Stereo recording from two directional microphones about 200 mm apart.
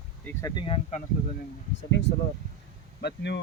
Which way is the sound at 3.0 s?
55° left (ahead or behind).